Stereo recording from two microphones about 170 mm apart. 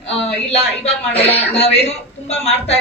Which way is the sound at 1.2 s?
35° left (ahead or behind).